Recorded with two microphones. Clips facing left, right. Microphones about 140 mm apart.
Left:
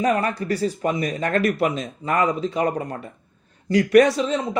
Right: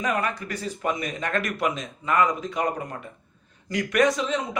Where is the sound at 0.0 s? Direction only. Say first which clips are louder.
Left 5 dB; 35° left (ahead or behind).